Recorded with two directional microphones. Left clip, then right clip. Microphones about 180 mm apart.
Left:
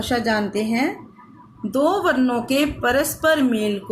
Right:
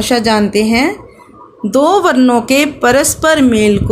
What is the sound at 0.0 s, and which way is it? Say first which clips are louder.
Speech: right 9 dB; 50° right (ahead or behind).